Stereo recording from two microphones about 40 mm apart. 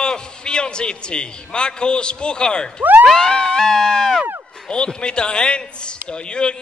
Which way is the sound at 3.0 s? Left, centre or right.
Centre.